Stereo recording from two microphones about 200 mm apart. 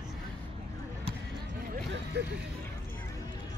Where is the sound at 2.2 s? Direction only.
55° right (ahead or behind).